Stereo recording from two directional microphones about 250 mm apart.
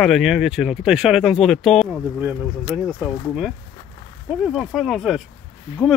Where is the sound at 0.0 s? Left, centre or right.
Centre.